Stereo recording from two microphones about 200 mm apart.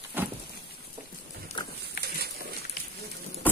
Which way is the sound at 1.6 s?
25° left (ahead or behind).